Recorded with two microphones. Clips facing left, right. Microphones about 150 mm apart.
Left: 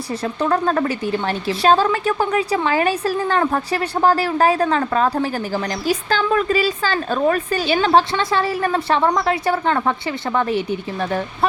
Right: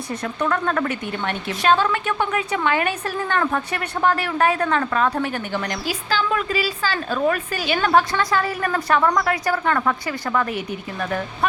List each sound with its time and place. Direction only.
0.1 s a woman's voice: 30° left (ahead or behind)